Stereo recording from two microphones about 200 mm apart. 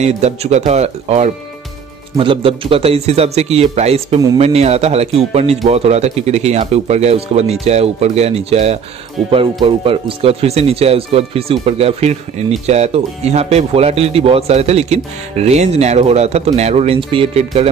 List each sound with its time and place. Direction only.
0.0 s speech: 35° right (ahead or behind)